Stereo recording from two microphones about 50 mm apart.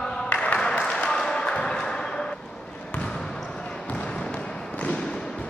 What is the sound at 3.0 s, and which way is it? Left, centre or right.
Basketball bounce, centre.